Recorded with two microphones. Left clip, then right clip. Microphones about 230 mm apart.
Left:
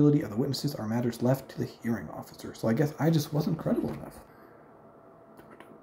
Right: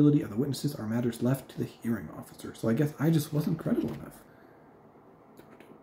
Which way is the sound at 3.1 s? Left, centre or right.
Right.